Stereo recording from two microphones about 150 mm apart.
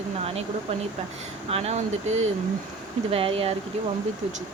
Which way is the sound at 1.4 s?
45° right (ahead or behind).